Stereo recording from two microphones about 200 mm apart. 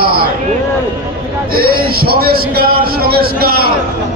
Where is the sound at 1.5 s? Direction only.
50° right (ahead or behind).